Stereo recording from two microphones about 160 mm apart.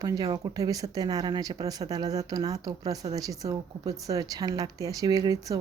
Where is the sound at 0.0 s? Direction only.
20° right (ahead or behind).